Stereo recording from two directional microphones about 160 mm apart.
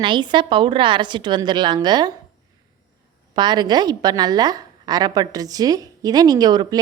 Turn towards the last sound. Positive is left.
turn(degrees=-25)  # may be behind; listen again after turning